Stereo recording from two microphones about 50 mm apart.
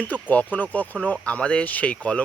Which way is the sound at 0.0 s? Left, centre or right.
Left.